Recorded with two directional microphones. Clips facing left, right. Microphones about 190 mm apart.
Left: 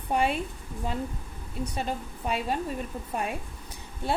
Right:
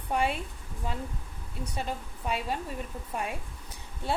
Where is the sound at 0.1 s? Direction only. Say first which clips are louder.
Left 3 dB; 20° left (ahead or behind).